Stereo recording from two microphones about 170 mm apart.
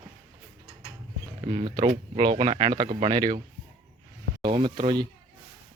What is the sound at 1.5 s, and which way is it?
Speech, 30° right (ahead or behind).